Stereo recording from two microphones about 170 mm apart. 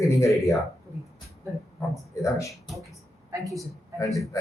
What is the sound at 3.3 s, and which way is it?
Speech, 20° right (ahead or behind).